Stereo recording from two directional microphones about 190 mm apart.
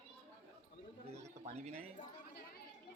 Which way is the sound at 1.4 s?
35° right (ahead or behind).